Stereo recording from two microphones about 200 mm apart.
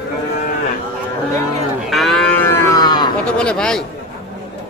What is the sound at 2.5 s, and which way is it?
Livestock, 15° left (ahead or behind).